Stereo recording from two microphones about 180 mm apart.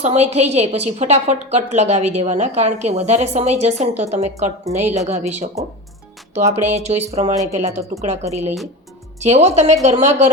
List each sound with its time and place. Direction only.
0.0 s a woman's voice: 40° right (ahead or behind)
4.6 s a woman's voice: 10° right (ahead or behind)
4.9 s a woman's voice: 40° right (ahead or behind)